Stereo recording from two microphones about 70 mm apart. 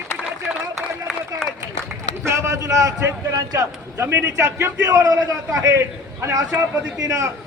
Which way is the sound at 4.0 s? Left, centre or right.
Right.